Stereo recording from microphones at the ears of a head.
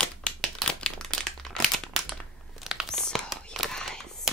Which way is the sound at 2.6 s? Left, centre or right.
Centre.